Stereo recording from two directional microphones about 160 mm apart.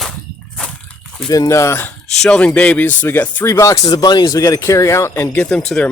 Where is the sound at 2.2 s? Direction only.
5° left (ahead or behind).